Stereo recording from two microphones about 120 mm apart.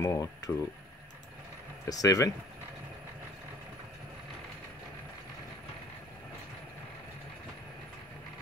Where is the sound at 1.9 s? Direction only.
30° left (ahead or behind).